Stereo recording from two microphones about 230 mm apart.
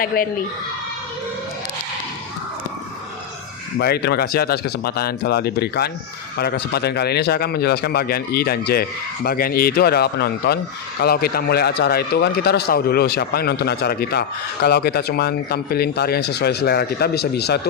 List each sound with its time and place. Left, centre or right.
0.0 s speech: left
3.8 s speech: left